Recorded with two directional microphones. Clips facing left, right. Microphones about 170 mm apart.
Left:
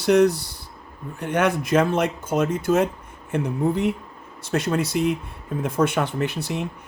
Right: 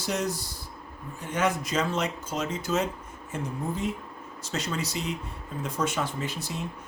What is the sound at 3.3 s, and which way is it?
Speech, 65° left (ahead or behind).